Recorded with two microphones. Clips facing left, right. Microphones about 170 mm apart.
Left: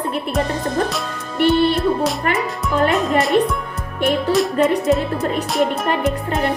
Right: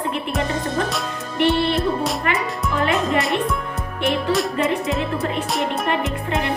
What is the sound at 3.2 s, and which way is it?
Music, centre (ahead or behind).